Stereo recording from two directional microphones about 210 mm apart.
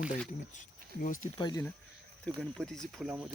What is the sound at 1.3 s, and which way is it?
Speech, 20° left (ahead or behind).